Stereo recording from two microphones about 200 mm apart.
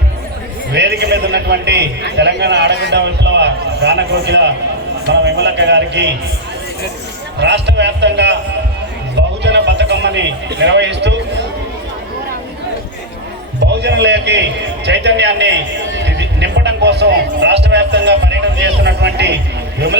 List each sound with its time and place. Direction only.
0.7 s a man's voice: 60° right (ahead or behind)
7.3 s a man's voice: 60° right (ahead or behind)
9.4 s a sound: 60° right (ahead or behind)
13.6 s a man's voice: 60° right (ahead or behind)